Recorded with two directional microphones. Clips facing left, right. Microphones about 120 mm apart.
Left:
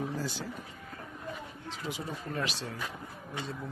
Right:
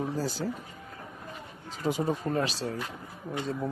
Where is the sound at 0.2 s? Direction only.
40° right (ahead or behind).